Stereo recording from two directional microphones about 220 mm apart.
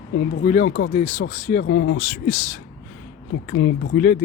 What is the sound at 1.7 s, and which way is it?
Speech, 55° left (ahead or behind).